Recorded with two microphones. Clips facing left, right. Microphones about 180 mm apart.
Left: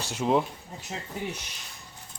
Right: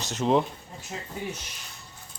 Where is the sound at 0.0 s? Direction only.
10° left (ahead or behind).